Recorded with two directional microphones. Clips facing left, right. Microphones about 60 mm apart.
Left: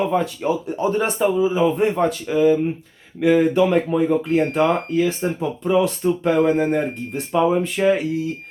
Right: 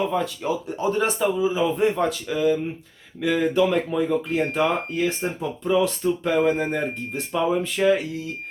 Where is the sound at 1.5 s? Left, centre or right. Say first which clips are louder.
Left 3 dB; left.